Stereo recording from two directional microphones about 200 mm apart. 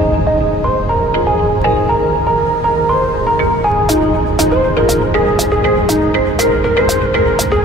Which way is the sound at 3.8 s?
Centre (ahead or behind).